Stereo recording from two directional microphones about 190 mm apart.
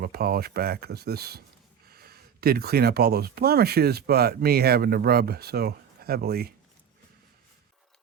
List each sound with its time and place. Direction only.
0.0 s speech: 50° right (ahead or behind)